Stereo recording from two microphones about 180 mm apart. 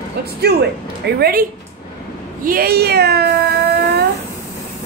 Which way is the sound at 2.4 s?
55° right (ahead or behind).